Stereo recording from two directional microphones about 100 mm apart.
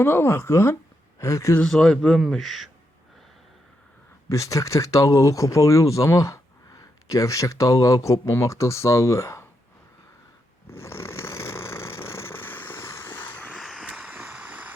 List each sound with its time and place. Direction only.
0.0 s speech: 25° left (ahead or behind)
1.6 s a man's voice: 5° left (ahead or behind)
4.3 s speech: 30° left (ahead or behind)
10.8 s vehicle: 25° left (ahead or behind)
13.6 s vehicle: centre (ahead or behind)
14.1 s vehicle: 15° right (ahead or behind)